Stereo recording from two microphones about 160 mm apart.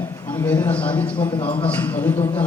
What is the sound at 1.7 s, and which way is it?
Speech, 10° left (ahead or behind).